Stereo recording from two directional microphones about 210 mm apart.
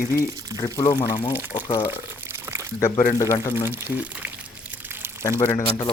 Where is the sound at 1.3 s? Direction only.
10° right (ahead or behind).